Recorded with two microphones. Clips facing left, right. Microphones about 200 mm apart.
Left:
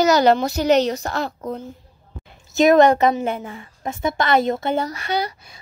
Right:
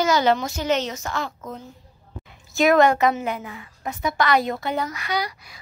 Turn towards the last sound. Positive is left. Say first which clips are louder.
# left 3 dB
turn(degrees=25)  # may be behind; listen again after turning